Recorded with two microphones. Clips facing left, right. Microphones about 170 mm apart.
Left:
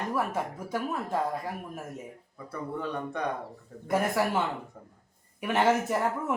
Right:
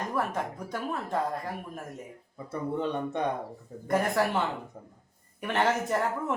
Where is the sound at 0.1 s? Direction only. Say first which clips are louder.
Left 1 dB; 5° left (ahead or behind).